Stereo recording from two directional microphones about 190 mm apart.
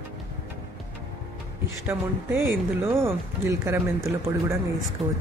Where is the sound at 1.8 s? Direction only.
10° right (ahead or behind).